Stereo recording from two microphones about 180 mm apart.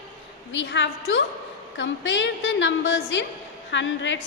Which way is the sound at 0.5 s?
90° left.